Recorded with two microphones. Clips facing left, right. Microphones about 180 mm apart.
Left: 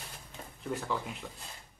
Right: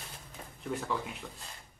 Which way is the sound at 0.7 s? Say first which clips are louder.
Even; centre (ahead or behind).